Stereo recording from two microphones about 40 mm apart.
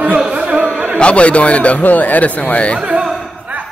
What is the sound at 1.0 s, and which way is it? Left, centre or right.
Speech, left.